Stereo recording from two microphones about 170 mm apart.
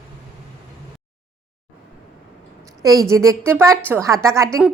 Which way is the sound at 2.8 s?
20° right (ahead or behind).